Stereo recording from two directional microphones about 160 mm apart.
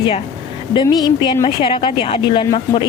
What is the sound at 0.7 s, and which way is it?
A woman's voice, 25° left (ahead or behind).